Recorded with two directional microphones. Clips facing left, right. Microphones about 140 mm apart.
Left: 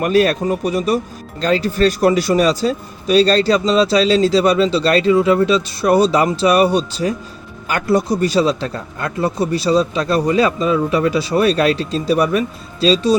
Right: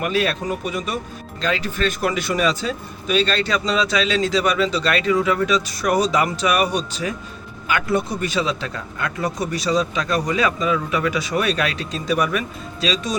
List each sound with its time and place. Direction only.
0.0 s speech: 45° left (ahead or behind)